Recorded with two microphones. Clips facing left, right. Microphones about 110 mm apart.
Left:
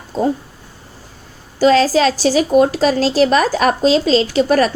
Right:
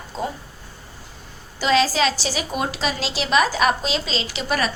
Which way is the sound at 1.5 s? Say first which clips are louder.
Left 7 dB; 40° left (ahead or behind).